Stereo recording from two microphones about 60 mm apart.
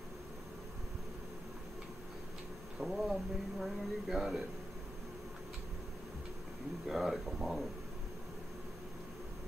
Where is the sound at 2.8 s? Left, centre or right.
Centre.